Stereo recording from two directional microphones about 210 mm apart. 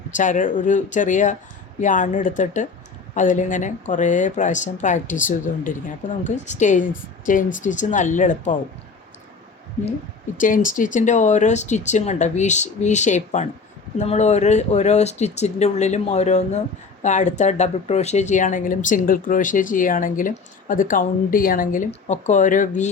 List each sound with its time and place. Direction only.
0.1 s speech: 35° left (ahead or behind)
10.3 s speech: 40° left (ahead or behind)